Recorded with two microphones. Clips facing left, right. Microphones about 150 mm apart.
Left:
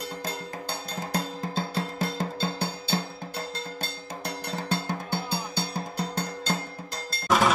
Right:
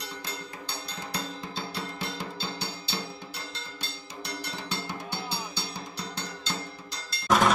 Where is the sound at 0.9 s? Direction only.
45° left (ahead or behind).